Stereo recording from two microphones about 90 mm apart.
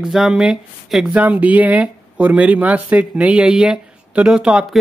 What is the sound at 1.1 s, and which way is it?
Speech, 15° right (ahead or behind).